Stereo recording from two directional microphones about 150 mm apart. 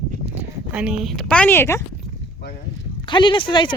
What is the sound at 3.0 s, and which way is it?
Speech, 30° left (ahead or behind).